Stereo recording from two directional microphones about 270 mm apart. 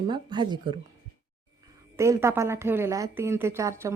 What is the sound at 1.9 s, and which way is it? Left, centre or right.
A woman's voice, centre.